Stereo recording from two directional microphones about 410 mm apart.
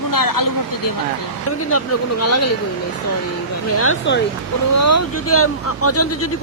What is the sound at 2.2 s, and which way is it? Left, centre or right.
Speech, left.